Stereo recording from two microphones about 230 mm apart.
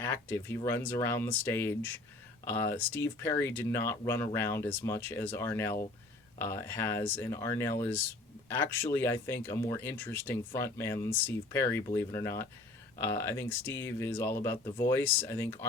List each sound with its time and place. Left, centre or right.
0.0 s speech: centre